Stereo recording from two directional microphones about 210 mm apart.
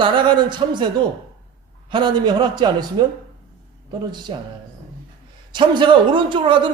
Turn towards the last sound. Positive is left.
turn(degrees=-25)  # may be behind; listen again after turning